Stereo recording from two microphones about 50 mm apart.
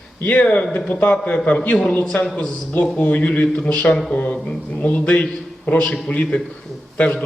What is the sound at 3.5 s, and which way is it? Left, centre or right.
A man's voice, centre.